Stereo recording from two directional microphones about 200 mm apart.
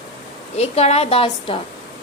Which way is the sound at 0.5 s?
30° left (ahead or behind).